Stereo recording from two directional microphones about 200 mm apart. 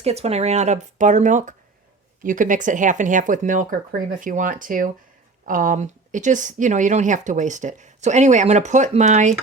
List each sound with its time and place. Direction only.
0.0 s speech: 30° right (ahead or behind)